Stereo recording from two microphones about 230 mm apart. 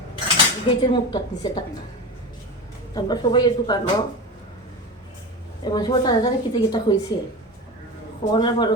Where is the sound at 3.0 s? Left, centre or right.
Centre.